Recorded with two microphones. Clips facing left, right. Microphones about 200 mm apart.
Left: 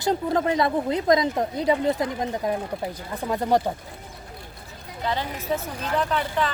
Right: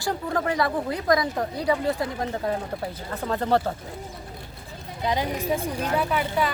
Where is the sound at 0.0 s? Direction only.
20° left (ahead or behind).